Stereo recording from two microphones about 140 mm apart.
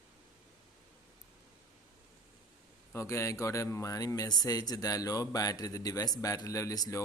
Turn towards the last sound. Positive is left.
turn(degrees=25)  # may be behind; listen again after turning